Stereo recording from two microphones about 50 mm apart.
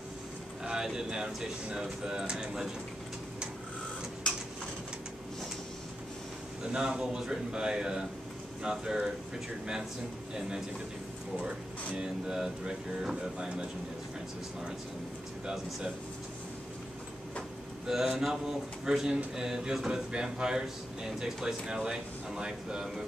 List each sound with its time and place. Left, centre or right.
0.7 s speech: centre
6.6 s speech: centre
12.0 s speech: centre
15.4 s speech: centre
17.8 s speech: centre